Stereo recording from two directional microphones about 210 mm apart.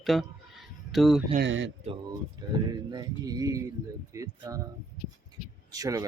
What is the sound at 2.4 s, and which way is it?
Speech, 20° right (ahead or behind).